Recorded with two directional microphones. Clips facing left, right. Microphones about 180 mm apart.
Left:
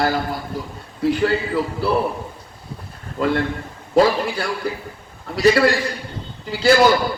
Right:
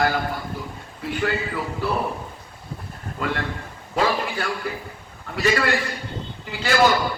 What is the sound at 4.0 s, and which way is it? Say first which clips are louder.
A man's voice: left 6 dB; 40° left (ahead or behind).